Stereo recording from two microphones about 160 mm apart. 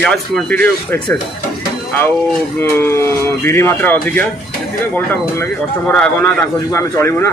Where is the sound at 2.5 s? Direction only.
15° left (ahead or behind).